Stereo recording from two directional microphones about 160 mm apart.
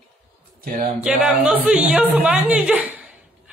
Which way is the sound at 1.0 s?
5° right (ahead or behind).